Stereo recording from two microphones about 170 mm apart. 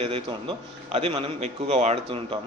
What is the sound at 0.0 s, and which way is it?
A man's voice, 35° right (ahead or behind).